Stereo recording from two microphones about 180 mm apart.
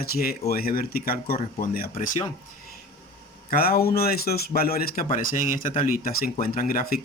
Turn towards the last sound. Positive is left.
turn(degrees=55)  # may be behind; listen again after turning